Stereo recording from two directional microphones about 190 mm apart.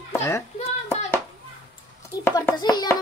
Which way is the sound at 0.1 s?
15° left (ahead or behind).